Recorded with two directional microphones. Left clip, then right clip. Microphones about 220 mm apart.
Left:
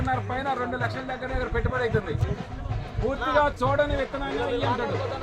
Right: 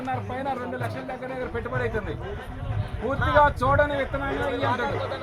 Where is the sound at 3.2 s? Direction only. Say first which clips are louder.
Right 3 dB; 10° left (ahead or behind).